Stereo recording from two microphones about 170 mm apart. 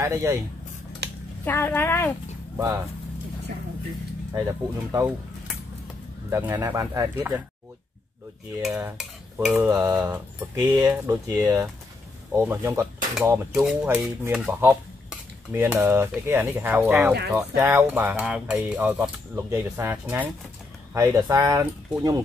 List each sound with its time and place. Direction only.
0.0 s speech: 15° right (ahead or behind)
1.4 s speech: 10° left (ahead or behind)
2.5 s speech: 15° right (ahead or behind)
4.3 s speech: 20° right (ahead or behind)
6.3 s speech: 15° right (ahead or behind)
8.6 s cutlery: 5° right (ahead or behind)
9.6 s speech: 15° right (ahead or behind)
10.6 s speech: 10° right (ahead or behind)
13.5 s speech: 5° right (ahead or behind); by 22.2 s 20° right (ahead or behind)